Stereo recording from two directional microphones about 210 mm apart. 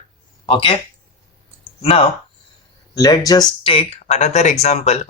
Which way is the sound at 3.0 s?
15° left (ahead or behind).